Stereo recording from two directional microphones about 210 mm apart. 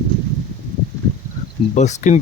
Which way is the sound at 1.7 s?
35° left (ahead or behind).